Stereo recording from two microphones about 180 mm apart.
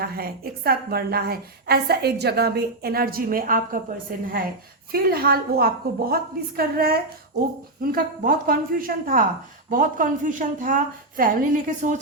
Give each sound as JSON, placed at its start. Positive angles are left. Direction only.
{"t": 0.0, "sound": "a woman's voice", "side_deg": -60}
{"t": 4.9, "sound": "a woman's voice", "side_deg": -55}